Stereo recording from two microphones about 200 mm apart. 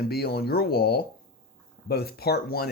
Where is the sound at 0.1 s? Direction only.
50° left (ahead or behind).